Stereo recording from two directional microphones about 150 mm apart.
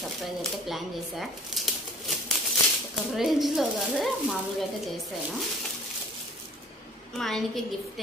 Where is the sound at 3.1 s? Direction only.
Centre (ahead or behind).